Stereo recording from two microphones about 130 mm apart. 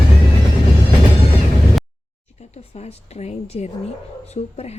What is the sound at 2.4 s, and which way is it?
A woman's voice, 55° left (ahead or behind).